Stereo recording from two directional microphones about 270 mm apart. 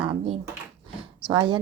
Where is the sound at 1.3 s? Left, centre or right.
Centre.